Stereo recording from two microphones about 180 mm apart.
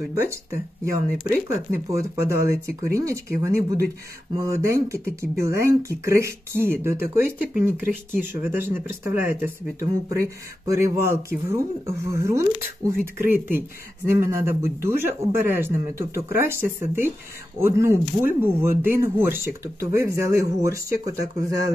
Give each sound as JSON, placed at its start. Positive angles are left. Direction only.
{"t": 0.2, "sound": "speech", "side_deg": -15}